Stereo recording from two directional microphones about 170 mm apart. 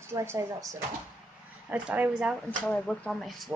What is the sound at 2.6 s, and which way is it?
Speech, 5° left (ahead or behind).